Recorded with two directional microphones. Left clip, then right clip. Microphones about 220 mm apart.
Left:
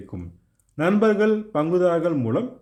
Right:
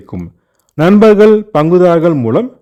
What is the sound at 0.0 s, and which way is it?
A man's voice, 45° right (ahead or behind).